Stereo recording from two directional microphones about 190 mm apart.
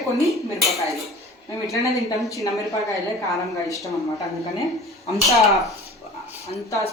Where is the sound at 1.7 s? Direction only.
15° left (ahead or behind).